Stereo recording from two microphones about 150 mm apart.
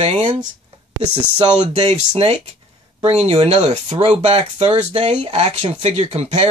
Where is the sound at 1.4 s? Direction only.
45° right (ahead or behind).